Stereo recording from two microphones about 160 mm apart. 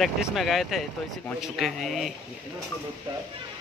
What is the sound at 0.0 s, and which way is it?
Speech, centre (ahead or behind).